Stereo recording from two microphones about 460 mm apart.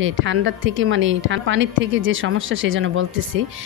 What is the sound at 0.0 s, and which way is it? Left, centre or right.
A woman's voice, right.